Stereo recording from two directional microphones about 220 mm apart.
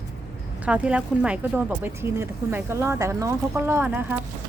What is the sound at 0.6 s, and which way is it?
A woman's voice, 5° right (ahead or behind).